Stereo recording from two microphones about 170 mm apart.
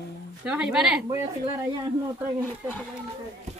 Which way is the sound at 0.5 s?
5° right (ahead or behind).